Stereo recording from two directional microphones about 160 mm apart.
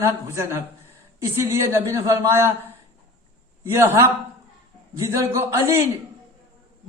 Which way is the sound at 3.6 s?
15° right (ahead or behind).